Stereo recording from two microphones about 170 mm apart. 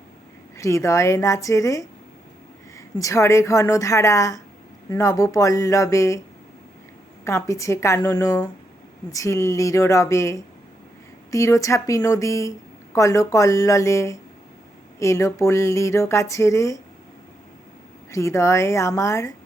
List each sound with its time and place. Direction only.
0.5 s speech: 20° left (ahead or behind)
7.3 s speech: 20° left (ahead or behind)
18.1 s speech: 15° left (ahead or behind)